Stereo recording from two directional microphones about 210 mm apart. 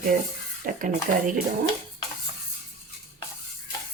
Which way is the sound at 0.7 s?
45° right (ahead or behind).